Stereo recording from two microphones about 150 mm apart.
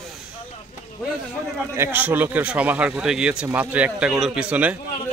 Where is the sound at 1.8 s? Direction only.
10° right (ahead or behind).